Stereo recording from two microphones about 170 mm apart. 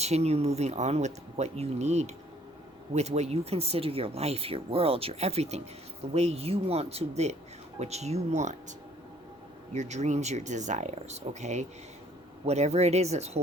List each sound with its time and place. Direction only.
0.0 s speech: 40° right (ahead or behind)
9.7 s speech: 40° right (ahead or behind)